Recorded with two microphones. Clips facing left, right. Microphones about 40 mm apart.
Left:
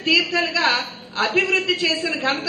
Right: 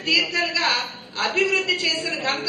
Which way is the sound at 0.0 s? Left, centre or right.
Centre.